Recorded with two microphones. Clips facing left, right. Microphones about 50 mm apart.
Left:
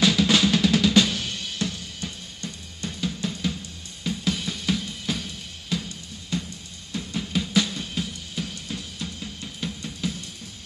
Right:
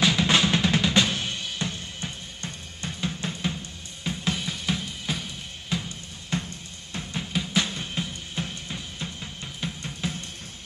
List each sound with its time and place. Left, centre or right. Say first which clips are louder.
0.0 s drum: left 2 dB; right
4.0 s music: left 2 dB; right
4.4 s drum kit: left 2 dB; centre
6.3 s drum: even; right
6.9 s music: left 3 dB; right
7.6 s drum: left 1 dB; right